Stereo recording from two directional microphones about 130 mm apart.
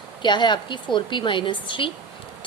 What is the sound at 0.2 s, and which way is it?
A woman's voice, 35° left (ahead or behind).